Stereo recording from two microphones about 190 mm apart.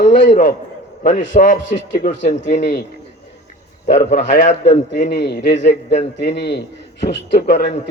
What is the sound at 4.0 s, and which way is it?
Speech, 40° left (ahead or behind).